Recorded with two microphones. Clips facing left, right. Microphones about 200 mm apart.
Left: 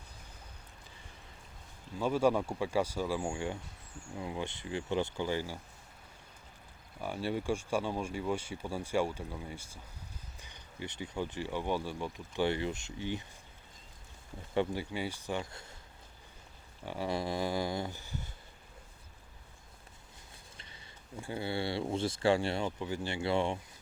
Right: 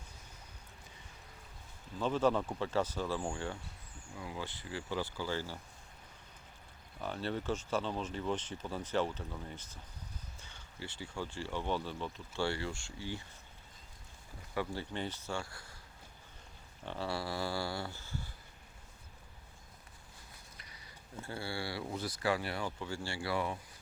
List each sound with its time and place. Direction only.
2.0 s speech: 10° left (ahead or behind)
7.0 s speech: 10° left (ahead or behind)
14.5 s speech: 25° left (ahead or behind)
14.8 s speech: 10° left (ahead or behind)
16.8 s speech: 10° left (ahead or behind)
20.6 s a sound: 25° left (ahead or behind)
21.2 s speech: 15° left (ahead or behind)